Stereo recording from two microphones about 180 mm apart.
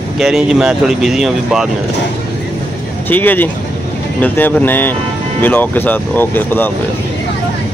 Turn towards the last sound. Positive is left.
turn(degrees=10)  # may be behind; listen again after turning